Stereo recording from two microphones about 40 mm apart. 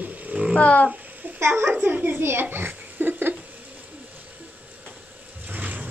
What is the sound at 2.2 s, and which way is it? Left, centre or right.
Speech, right.